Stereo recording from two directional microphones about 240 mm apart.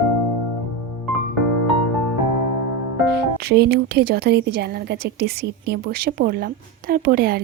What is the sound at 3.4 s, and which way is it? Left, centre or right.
A woman's voice, right.